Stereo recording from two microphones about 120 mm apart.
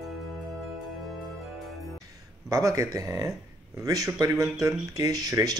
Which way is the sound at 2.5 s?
25° right (ahead or behind).